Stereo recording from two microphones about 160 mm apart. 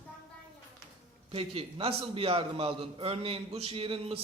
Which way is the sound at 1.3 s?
35° right (ahead or behind).